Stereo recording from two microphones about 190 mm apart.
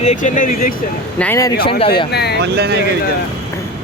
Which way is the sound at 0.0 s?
40° left (ahead or behind).